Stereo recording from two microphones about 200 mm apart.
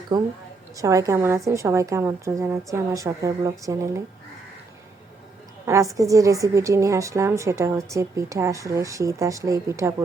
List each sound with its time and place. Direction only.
0.1 s a woman's voice: 20° right (ahead or behind)
5.6 s a woman's voice: 15° right (ahead or behind)